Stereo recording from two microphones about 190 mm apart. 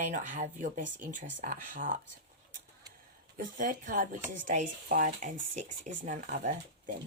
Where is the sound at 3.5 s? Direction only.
45° right (ahead or behind).